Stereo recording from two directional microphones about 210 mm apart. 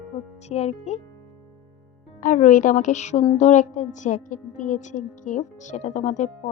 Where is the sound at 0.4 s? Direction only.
30° left (ahead or behind).